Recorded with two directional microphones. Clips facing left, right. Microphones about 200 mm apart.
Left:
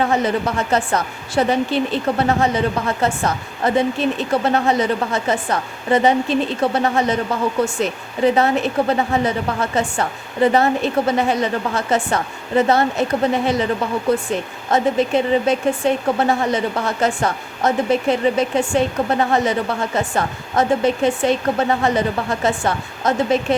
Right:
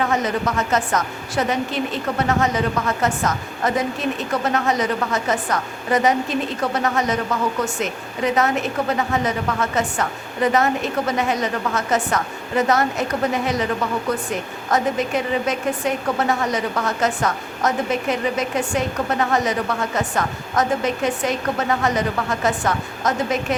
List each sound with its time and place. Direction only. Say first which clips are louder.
0.0 s a woman's voice: left 3 dB; 30° left (ahead or behind)
14.7 s a woman's voice: left 4 dB; 30° left (ahead or behind)
20.0 s a woman's voice: left 2 dB; 30° left (ahead or behind)